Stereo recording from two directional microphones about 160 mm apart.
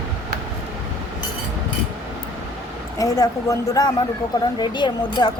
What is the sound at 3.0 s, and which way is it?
Speech, 20° left (ahead or behind).